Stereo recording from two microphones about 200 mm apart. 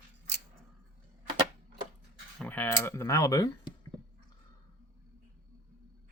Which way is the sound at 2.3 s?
5° left (ahead or behind).